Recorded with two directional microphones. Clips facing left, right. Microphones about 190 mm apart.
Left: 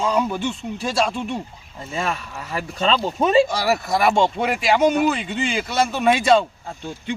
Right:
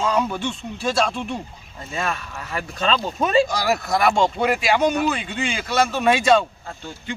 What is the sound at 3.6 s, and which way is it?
Speech, 5° left (ahead or behind).